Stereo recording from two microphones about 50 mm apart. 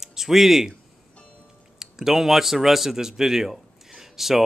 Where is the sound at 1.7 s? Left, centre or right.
Centre.